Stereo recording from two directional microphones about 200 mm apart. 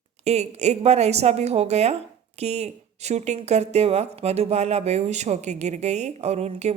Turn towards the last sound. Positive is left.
turn(degrees=-35)  # may be behind; listen again after turning